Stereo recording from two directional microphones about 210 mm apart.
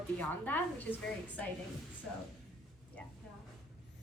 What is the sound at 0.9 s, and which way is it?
Speech, 5° right (ahead or behind).